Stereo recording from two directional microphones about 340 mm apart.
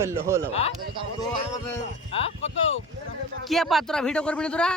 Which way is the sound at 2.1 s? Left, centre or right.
Centre.